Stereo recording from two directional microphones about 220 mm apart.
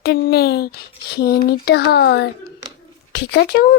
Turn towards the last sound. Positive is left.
turn(degrees=45)  # may be behind; listen again after turning